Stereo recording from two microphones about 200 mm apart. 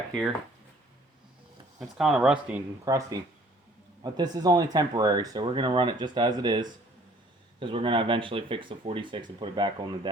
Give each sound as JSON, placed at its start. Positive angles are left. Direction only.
{"t": 0.1, "sound": "speech", "side_deg": 0}
{"t": 1.8, "sound": "speech", "side_deg": 0}